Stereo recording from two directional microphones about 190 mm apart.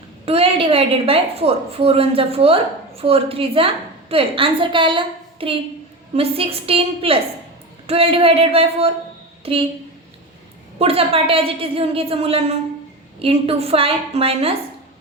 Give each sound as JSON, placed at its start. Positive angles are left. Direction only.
{"t": 0.3, "sound": "a woman's voice", "side_deg": -30}
{"t": 10.8, "sound": "a woman's voice", "side_deg": -30}